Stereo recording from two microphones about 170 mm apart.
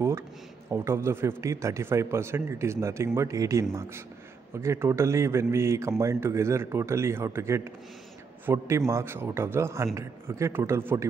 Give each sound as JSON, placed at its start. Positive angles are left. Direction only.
{"t": 0.7, "sound": "a man's voice", "side_deg": -15}